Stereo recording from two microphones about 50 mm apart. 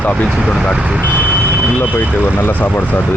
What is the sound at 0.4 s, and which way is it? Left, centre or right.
Speech, centre.